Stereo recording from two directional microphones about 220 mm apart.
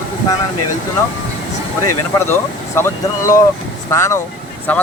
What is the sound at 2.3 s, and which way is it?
Speech, 10° left (ahead or behind).